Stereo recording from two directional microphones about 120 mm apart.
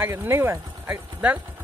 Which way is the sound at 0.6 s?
25° right (ahead or behind).